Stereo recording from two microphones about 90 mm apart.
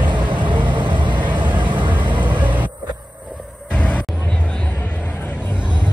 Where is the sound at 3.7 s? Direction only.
15° left (ahead or behind).